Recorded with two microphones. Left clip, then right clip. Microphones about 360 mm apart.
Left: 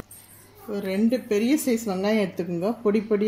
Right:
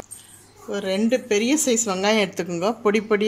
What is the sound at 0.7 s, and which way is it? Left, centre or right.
Speech, right.